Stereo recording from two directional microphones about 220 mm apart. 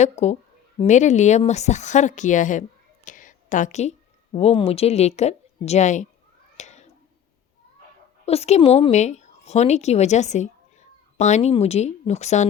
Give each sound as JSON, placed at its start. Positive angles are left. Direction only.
{"t": 0.0, "sound": "a woman's voice", "side_deg": 30}
{"t": 6.6, "sound": "cat", "side_deg": 30}
{"t": 8.2, "sound": "a woman's voice", "side_deg": 30}